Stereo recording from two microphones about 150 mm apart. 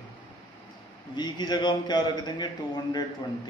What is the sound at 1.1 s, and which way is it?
A man's voice, 30° left (ahead or behind).